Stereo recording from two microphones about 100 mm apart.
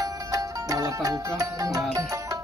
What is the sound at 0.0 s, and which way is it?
Music, 35° right (ahead or behind).